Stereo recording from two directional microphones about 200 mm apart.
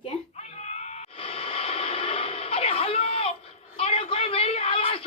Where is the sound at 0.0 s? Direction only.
30° left (ahead or behind).